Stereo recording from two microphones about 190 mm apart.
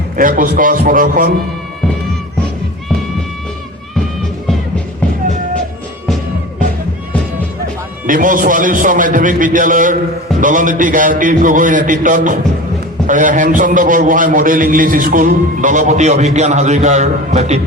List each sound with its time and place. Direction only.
0.2 s a man's voice: 45° right (ahead or behind)
8.0 s a man's voice: 45° right (ahead or behind)